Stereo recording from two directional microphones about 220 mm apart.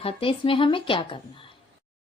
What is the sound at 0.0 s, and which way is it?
A woman's voice, 25° left (ahead or behind).